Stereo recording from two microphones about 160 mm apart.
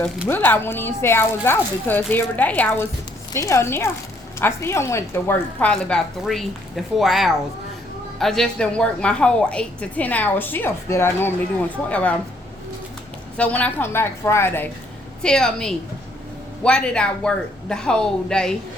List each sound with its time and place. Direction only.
0.3 s a woman's voice: 10° left (ahead or behind)
13.3 s a woman's voice: 10° left (ahead or behind)